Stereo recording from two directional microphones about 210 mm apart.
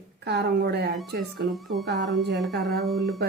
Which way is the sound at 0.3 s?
50° right (ahead or behind).